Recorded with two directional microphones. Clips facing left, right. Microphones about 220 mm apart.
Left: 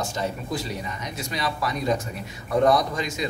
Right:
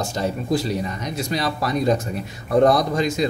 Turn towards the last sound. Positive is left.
turn(degrees=-35)  # may be behind; listen again after turning